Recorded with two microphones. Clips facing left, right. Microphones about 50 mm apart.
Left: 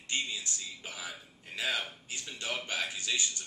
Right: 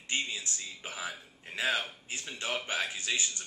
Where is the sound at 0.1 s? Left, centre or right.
Right.